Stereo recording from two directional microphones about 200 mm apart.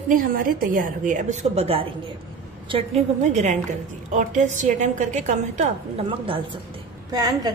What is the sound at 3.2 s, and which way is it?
A woman's voice, 35° right (ahead or behind).